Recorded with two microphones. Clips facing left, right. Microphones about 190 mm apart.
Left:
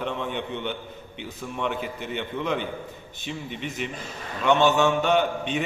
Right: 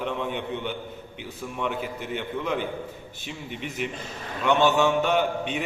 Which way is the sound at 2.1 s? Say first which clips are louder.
Left 1 dB; 5° right (ahead or behind).